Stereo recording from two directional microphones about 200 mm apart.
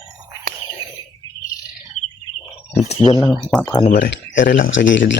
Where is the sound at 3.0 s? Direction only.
15° left (ahead or behind).